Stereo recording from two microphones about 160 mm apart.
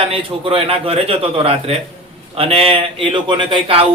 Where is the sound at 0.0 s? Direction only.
35° right (ahead or behind).